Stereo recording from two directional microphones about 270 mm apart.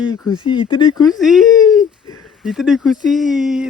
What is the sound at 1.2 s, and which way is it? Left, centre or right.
Speech, centre.